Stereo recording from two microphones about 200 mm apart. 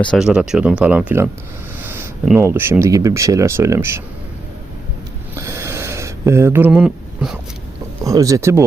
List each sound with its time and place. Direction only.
0.0 s speech: centre (ahead or behind)
5.4 s a sound: 15° right (ahead or behind)
8.0 s speech: 15° right (ahead or behind)